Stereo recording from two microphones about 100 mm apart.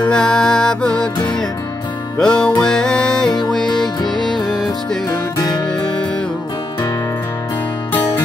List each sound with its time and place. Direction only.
0.1 s music: 5° left (ahead or behind)
2.1 s music: 10° left (ahead or behind)
4.0 s music: 50° left (ahead or behind)
4.3 s music: centre (ahead or behind)
5.7 s music: 10° left (ahead or behind)